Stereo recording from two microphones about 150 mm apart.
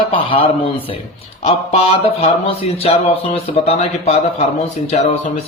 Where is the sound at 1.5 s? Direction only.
40° left (ahead or behind).